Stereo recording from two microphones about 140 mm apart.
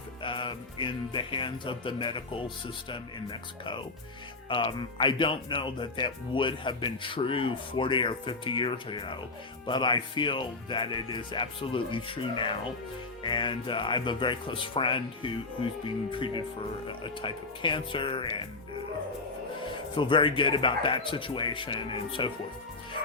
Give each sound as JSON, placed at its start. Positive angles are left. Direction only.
{"t": 0.2, "sound": "speech", "side_deg": 35}
{"t": 19.7, "sound": "speech", "side_deg": 35}